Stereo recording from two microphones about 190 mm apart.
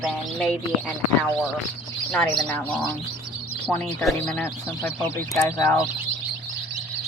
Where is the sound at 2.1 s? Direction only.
5° left (ahead or behind).